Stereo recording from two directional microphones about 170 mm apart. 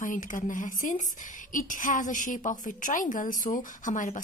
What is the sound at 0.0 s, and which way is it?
A woman's voice, 50° left (ahead or behind).